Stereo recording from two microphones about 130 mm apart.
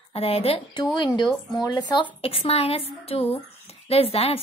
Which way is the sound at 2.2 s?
45° left (ahead or behind).